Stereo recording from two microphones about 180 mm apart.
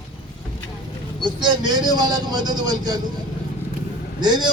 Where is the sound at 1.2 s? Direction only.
25° right (ahead or behind).